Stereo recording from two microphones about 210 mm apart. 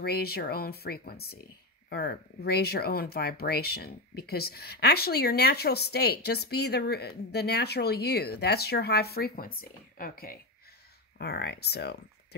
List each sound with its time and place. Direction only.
0.0 s speech: 50° left (ahead or behind)